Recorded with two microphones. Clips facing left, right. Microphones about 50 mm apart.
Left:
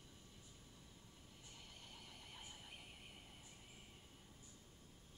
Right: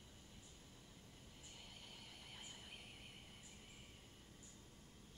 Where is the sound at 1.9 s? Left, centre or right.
Centre.